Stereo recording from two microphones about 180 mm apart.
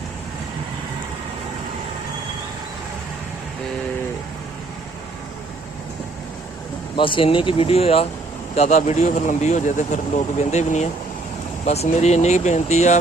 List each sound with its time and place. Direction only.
6.9 s a man's voice: 30° left (ahead or behind)